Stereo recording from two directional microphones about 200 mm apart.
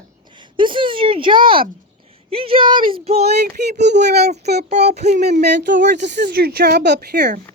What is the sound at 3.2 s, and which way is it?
Speech, 50° right (ahead or behind).